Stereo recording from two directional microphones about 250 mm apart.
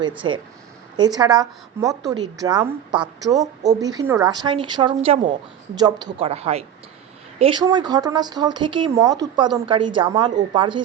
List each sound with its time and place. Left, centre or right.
0.2 s a woman's voice: centre
3.4 s a woman's voice: right
3.8 s a woman's voice: centre